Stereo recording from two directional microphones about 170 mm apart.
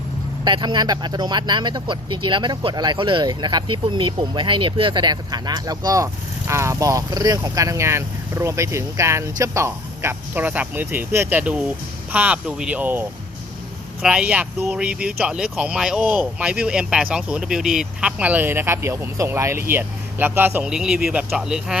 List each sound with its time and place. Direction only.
0.4 s speech: 25° right (ahead or behind); by 21.8 s 5° right (ahead or behind)